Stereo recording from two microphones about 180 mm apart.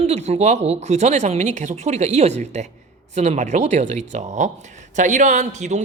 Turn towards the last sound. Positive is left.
turn(degrees=-40)  # may be behind; listen again after turning